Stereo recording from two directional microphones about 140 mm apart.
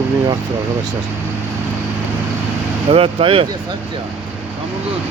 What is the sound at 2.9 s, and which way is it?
Speech, 45° right (ahead or behind).